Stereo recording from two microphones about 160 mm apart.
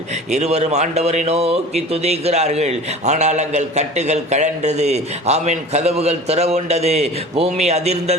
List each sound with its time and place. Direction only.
0.3 s speech: 45° right (ahead or behind)